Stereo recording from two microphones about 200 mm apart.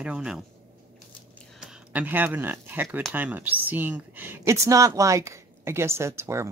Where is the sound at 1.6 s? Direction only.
5° right (ahead or behind).